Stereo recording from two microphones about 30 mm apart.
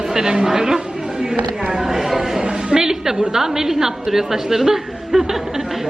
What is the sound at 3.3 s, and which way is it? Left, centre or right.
A woman's voice, centre.